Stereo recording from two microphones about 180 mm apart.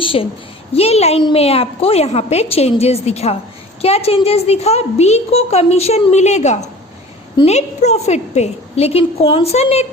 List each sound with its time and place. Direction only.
0.0 s a woman's voice: 30° left (ahead or behind)